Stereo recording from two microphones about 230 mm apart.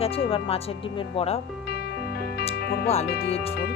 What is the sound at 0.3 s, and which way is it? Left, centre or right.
Speech, left.